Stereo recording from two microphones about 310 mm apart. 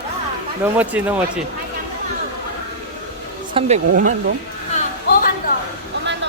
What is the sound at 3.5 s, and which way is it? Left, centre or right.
Speech, right.